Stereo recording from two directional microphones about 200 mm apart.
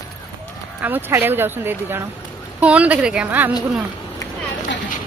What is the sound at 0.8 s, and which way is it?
Speech, 10° right (ahead or behind).